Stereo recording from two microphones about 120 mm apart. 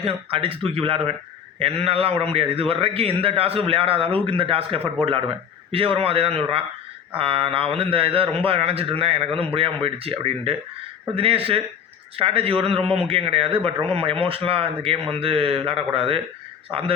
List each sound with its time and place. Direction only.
0.0 s a man's voice: 50° right (ahead or behind)